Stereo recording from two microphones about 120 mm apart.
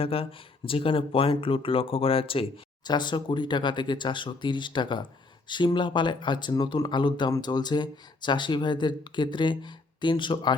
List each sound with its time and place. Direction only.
0.0 s speech: 50° left (ahead or behind)